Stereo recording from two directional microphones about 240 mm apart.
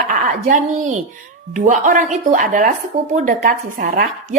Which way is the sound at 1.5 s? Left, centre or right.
Right.